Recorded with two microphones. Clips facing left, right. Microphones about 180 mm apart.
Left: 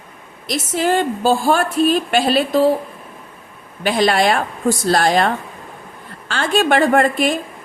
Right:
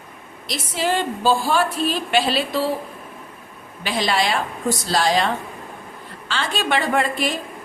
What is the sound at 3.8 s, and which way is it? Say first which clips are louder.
A woman's voice: left 6 dB; 55° left (ahead or behind).